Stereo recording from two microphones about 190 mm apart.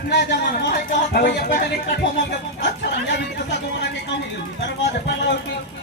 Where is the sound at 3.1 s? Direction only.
65° left (ahead or behind).